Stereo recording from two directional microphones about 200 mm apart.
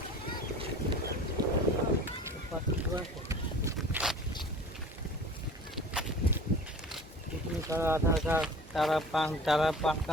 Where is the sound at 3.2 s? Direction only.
15° right (ahead or behind).